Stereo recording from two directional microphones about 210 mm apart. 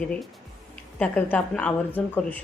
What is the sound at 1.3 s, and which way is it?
Speech, 5° left (ahead or behind).